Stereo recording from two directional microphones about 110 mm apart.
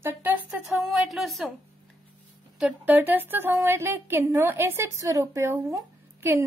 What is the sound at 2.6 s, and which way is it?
A woman's voice, 10° right (ahead or behind).